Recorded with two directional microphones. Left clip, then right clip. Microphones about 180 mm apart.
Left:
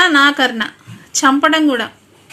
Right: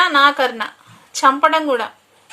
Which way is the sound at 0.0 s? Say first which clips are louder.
Left 2 dB; 55° right (ahead or behind).